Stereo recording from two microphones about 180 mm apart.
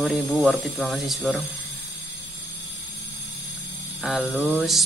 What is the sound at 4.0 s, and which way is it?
Speech, centre (ahead or behind).